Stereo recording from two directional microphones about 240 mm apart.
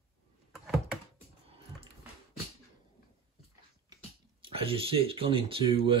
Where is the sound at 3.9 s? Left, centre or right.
Right.